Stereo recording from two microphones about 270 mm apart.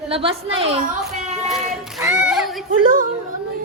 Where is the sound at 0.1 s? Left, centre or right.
Right.